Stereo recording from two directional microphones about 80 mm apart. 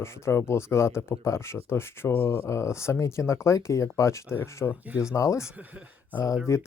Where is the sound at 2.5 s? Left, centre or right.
Left.